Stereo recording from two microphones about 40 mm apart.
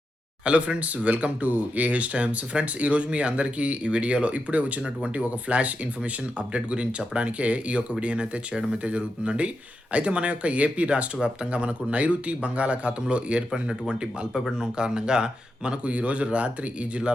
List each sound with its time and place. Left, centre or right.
0.4 s speech: right